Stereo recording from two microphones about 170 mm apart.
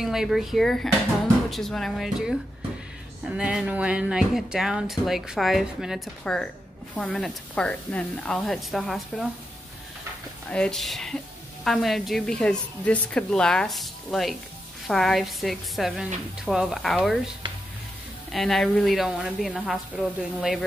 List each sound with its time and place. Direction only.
0.0 s speech: centre (ahead or behind)
10.5 s speech: 5° left (ahead or behind)
18.3 s speech: centre (ahead or behind)